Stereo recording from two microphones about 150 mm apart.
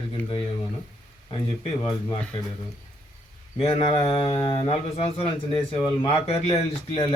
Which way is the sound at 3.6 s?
45° left (ahead or behind).